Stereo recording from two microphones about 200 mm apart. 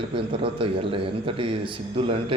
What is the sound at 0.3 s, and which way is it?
A man's voice, 25° right (ahead or behind).